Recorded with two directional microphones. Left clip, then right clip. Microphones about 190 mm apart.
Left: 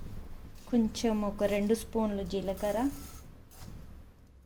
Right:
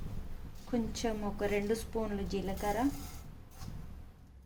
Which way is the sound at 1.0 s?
45° left (ahead or behind).